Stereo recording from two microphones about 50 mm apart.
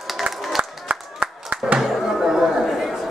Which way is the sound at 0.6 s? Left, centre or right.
Right.